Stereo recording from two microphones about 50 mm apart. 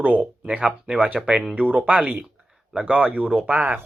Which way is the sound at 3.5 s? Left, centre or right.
Right.